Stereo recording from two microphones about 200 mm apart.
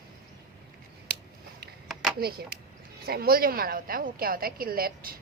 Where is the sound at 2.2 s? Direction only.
50° right (ahead or behind).